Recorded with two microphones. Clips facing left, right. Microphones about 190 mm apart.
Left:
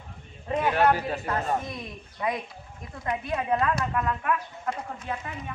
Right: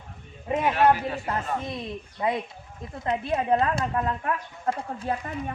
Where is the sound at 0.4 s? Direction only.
20° right (ahead or behind).